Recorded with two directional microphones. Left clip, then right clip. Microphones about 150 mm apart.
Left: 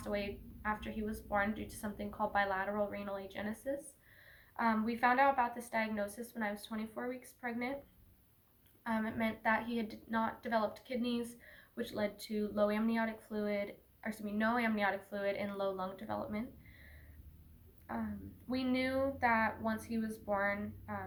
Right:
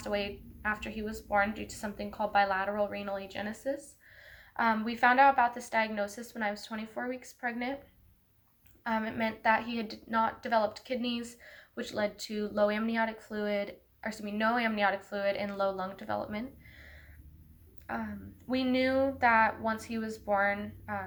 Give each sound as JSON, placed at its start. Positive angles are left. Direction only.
{"t": 0.0, "sound": "a woman's voice", "side_deg": -20}
{"t": 8.8, "sound": "a woman's voice", "side_deg": -20}
{"t": 18.4, "sound": "a woman's voice", "side_deg": -20}